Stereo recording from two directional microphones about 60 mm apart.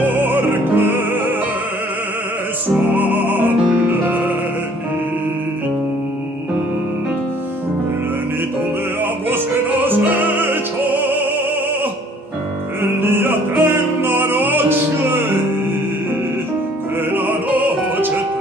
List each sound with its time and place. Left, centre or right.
0.0 s music: right
2.9 s music: right
9.3 s music: right
12.8 s music: right
17.1 s music: right